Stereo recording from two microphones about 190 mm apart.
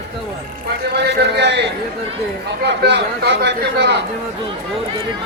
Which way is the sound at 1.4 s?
65° right (ahead or behind).